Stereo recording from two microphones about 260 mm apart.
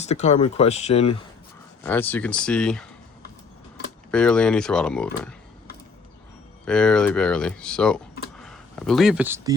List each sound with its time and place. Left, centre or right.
0.0 s speech: left
1.8 s speech: centre
4.1 s speech: centre
6.7 s speech: centre